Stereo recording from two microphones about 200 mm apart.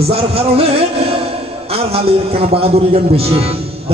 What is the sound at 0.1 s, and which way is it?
A man's voice, 30° right (ahead or behind).